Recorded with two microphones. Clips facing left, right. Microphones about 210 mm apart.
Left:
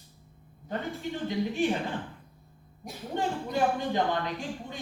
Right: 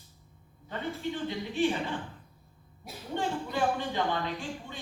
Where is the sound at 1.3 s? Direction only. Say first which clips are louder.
Left 2 dB; 45° left (ahead or behind).